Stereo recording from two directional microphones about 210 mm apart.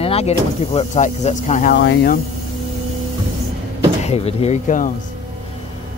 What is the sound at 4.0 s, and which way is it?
Speech, 30° left (ahead or behind).